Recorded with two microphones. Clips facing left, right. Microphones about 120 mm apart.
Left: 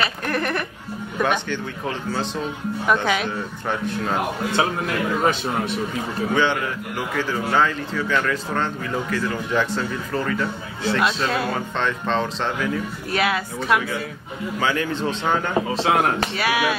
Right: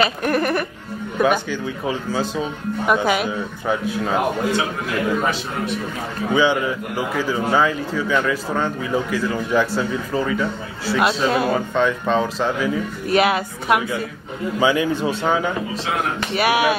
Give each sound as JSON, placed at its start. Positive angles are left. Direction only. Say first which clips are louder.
{"t": 0.0, "sound": "a man's voice", "louder": "right 5 dB", "side_deg": -15}
{"t": 6.3, "sound": "a man's voice", "louder": "right 5 dB", "side_deg": -10}
{"t": 13.1, "sound": "a woman's voice", "louder": "right 5 dB", "side_deg": -20}
{"t": 16.3, "sound": "a woman's voice", "louder": "right 9 dB", "side_deg": -20}